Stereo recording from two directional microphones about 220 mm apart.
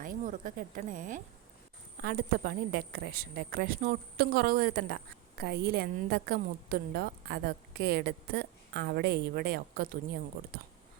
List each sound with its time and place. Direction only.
0.0 s a woman's voice: 35° right (ahead or behind)